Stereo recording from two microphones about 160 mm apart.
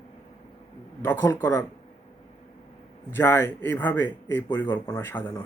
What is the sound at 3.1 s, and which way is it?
Speech, 15° left (ahead or behind).